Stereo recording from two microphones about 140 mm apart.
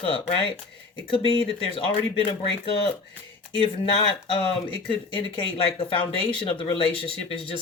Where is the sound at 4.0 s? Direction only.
40° left (ahead or behind).